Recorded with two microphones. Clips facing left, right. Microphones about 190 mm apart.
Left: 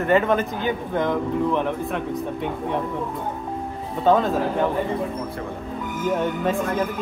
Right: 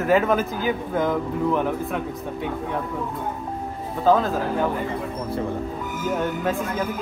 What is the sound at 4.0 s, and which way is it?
Speech, centre (ahead or behind).